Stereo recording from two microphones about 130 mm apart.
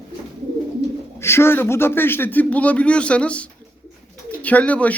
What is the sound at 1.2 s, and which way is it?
Speech, 20° left (ahead or behind).